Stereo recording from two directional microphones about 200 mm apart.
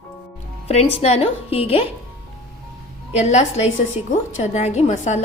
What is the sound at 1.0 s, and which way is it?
Speech, 30° left (ahead or behind).